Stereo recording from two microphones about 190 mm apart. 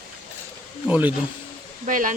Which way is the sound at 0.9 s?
10° right (ahead or behind).